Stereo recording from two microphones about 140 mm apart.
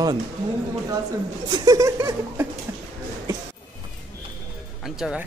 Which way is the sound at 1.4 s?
30° right (ahead or behind).